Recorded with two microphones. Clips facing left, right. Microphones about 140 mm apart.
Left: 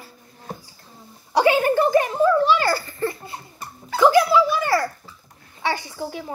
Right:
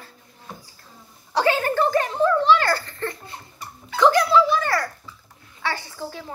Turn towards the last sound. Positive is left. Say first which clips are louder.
# left 3 dB
turn(degrees=15)  # may be behind; listen again after turning